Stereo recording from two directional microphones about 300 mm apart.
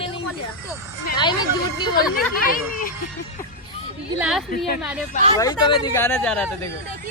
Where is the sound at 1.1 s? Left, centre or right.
Centre.